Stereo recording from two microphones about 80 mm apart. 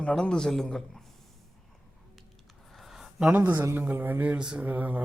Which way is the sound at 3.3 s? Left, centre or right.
Right.